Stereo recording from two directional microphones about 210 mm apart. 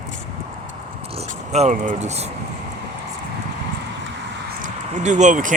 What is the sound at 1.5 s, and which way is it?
Speech, 35° right (ahead or behind).